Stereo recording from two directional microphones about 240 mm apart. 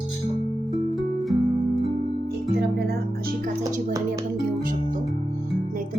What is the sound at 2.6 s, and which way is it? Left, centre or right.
Music, right.